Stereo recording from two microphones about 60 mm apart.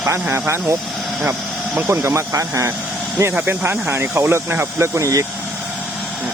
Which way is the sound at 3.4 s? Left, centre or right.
Right.